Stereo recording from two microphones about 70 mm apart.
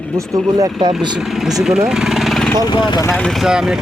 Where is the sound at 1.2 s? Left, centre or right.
Centre.